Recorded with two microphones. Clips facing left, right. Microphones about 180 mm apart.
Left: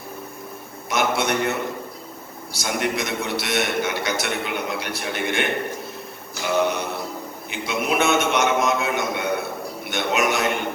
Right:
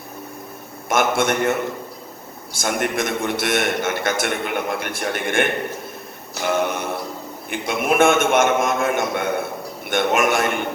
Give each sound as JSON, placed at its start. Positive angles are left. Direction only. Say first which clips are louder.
{"t": 0.9, "sound": "a man's voice", "louder": "right 3 dB", "side_deg": -50}
{"t": 6.4, "sound": "a sound", "louder": "even", "side_deg": -50}
{"t": 7.5, "sound": "a man's voice", "louder": "right 3 dB", "side_deg": -50}